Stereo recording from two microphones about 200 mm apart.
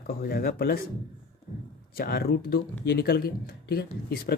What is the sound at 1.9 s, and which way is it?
Speech, 50° left (ahead or behind).